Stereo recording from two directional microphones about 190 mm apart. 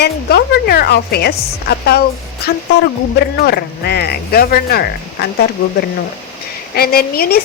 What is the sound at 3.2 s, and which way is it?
Speech, 60° left (ahead or behind).